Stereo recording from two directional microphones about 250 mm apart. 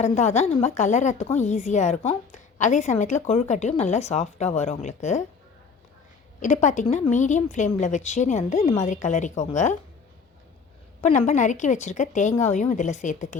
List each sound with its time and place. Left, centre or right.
0.0 s a woman's voice: left
6.4 s a woman's voice: left
11.0 s a woman's voice: left